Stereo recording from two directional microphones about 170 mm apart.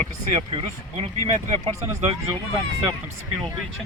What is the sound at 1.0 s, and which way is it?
Speech, 30° right (ahead or behind).